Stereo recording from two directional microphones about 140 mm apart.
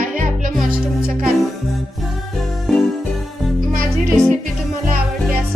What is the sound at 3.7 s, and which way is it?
Music, 75° right (ahead or behind).